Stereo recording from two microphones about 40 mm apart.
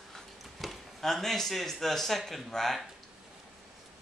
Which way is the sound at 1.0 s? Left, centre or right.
Centre.